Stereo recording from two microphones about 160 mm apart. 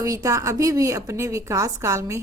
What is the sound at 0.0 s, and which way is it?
A woman's voice, 20° right (ahead or behind).